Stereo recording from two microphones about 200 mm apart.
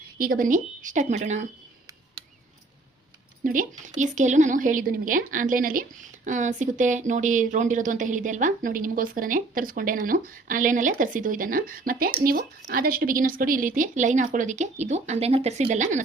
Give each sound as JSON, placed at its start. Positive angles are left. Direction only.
{"t": 0.2, "sound": "speech", "side_deg": -45}
{"t": 3.4, "sound": "speech", "side_deg": -40}